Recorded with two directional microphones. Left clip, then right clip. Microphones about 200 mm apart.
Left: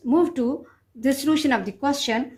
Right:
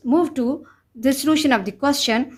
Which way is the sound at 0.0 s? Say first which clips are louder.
Right 1 dB; 30° right (ahead or behind).